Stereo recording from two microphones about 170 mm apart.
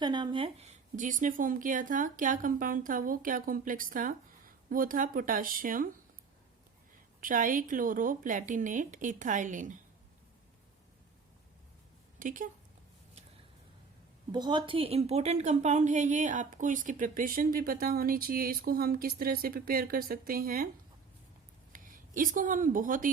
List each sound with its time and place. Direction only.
0.0 s a woman's voice: 25° right (ahead or behind); by 5.9 s 55° right (ahead or behind)
7.2 s speech: 50° right (ahead or behind)
12.2 s speech: 50° right (ahead or behind)
14.3 s a woman's voice: 25° right (ahead or behind); by 20.7 s 60° right (ahead or behind)
21.7 s speech: 50° right (ahead or behind)